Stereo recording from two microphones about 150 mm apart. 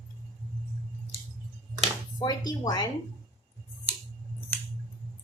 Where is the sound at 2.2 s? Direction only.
25° left (ahead or behind).